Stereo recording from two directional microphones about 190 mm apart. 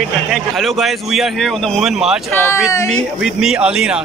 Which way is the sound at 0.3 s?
Centre (ahead or behind).